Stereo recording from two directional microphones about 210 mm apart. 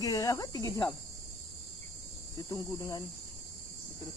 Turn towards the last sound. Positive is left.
turn(degrees=15)  # may be behind; listen again after turning